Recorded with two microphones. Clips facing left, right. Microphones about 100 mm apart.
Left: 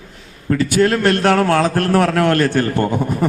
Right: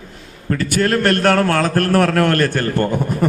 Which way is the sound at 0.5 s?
50° right (ahead or behind).